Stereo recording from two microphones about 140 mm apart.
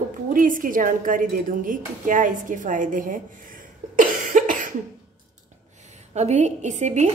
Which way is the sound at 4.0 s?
75° right (ahead or behind).